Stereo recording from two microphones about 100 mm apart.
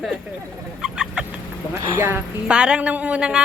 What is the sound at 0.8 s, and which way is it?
Chicken, 10° right (ahead or behind).